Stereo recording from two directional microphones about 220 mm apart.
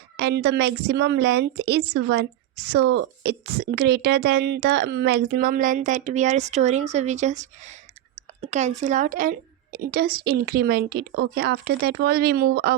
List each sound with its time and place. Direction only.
0.2 s a woman's voice: 50° right (ahead or behind); by 7.8 s 30° right (ahead or behind)
8.4 s a sound: 30° right (ahead or behind)
8.8 s a woman's voice: 35° right (ahead or behind)